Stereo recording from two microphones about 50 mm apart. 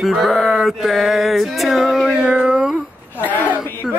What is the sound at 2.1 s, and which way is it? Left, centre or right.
Dog, right.